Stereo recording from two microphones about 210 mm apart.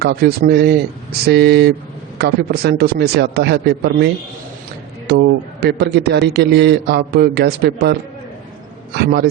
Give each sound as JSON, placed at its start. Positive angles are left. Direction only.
{"t": 0.0, "sound": "a man's voice", "side_deg": -50}
{"t": 9.0, "sound": "a man's voice", "side_deg": -50}